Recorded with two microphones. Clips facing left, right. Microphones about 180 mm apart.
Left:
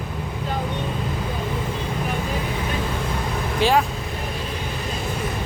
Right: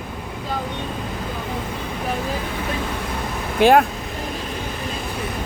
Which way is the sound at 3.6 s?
55° right (ahead or behind).